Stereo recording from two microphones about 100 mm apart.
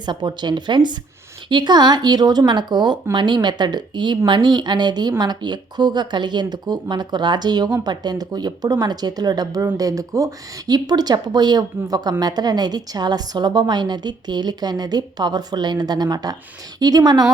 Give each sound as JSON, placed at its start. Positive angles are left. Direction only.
{"t": 0.0, "sound": "a woman's voice", "side_deg": -45}